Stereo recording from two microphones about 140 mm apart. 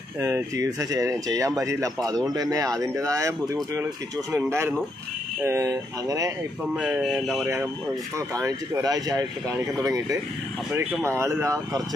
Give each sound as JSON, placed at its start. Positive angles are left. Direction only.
{"t": 0.2, "sound": "speech", "side_deg": -25}
{"t": 6.7, "sound": "speech", "side_deg": -5}
{"t": 8.4, "sound": "speech", "side_deg": -25}
{"t": 10.7, "sound": "speech", "side_deg": -10}